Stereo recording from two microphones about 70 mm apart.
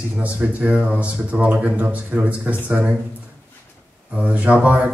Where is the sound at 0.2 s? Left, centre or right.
Centre.